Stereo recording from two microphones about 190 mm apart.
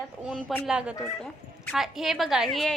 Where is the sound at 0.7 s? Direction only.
5° right (ahead or behind).